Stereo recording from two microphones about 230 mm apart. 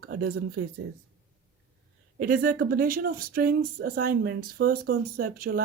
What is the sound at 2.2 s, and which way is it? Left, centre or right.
Speech, right.